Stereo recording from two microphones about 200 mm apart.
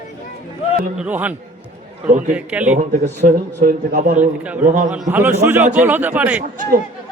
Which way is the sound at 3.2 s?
50° right (ahead or behind).